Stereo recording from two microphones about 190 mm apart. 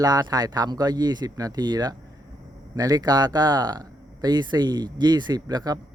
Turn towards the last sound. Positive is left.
turn(degrees=-20)  # may be behind; listen again after turning